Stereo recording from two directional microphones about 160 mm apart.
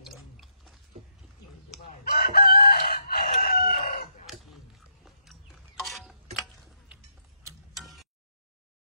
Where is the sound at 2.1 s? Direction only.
70° left (ahead or behind).